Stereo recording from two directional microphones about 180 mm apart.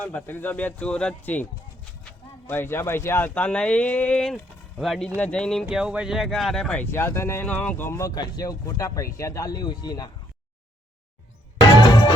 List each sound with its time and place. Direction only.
0.0 s speech: 10° left (ahead or behind)
2.5 s speech: 10° left (ahead or behind)
11.6 s music: 25° left (ahead or behind)